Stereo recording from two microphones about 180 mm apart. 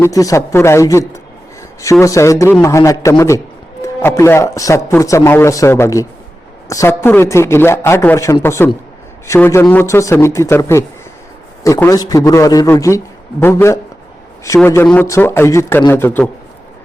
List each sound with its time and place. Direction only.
0.0 s a man's voice: 20° left (ahead or behind)